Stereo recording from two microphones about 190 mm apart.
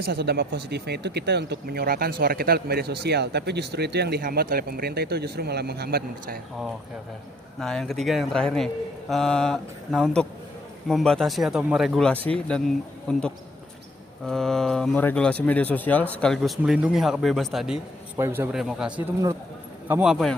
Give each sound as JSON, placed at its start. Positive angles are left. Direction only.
{"t": 0.0, "sound": "speech", "side_deg": -55}
{"t": 7.6, "sound": "a man's voice", "side_deg": 5}
{"t": 18.2, "sound": "a man's voice", "side_deg": -10}